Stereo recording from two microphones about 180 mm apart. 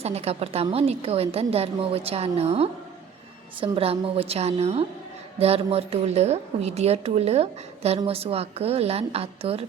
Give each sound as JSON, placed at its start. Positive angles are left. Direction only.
{"t": 0.0, "sound": "a woman's voice", "side_deg": -35}